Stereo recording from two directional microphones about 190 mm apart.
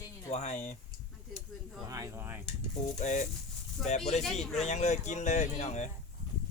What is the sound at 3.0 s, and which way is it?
Speech, 40° left (ahead or behind).